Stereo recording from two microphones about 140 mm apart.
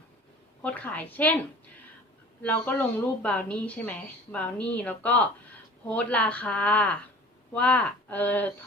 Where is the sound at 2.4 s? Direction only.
15° left (ahead or behind).